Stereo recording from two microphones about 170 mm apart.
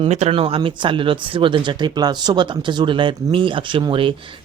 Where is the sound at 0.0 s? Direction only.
40° right (ahead or behind).